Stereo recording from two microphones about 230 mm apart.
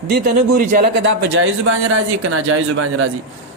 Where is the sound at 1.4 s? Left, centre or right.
Right.